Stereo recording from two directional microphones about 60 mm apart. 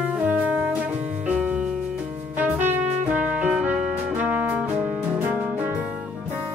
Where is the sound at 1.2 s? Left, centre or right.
Centre.